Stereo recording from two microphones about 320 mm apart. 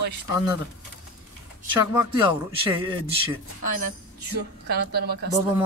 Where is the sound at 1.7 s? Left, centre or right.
Centre.